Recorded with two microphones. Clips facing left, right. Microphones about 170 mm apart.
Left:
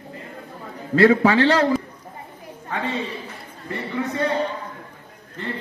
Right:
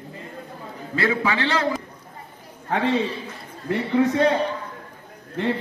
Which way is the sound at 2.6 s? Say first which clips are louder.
Right 5 dB; 65° right (ahead or behind).